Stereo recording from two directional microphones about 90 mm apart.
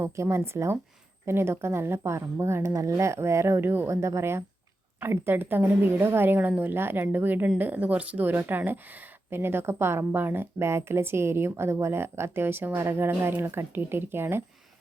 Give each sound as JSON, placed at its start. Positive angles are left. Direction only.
{"t": 0.0, "sound": "a woman's voice", "side_deg": -30}